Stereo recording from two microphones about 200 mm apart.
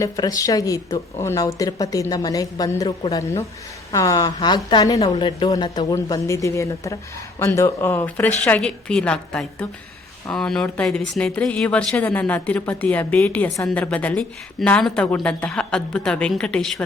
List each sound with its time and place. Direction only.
0.0 s speech: 20° left (ahead or behind)